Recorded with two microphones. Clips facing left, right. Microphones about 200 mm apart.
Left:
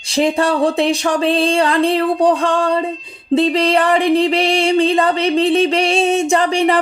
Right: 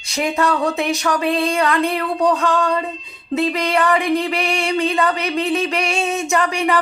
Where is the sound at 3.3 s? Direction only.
30° left (ahead or behind).